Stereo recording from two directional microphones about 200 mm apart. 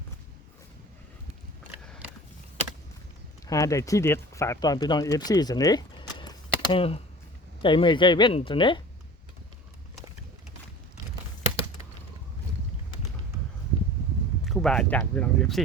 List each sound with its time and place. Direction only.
3.4 s speech: 15° left (ahead or behind)
14.4 s speech: centre (ahead or behind)